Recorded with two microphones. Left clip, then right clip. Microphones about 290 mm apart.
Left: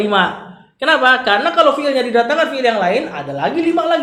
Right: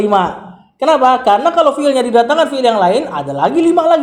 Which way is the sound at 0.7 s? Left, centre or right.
Right.